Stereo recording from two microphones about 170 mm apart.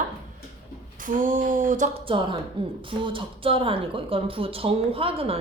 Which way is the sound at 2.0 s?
30° right (ahead or behind).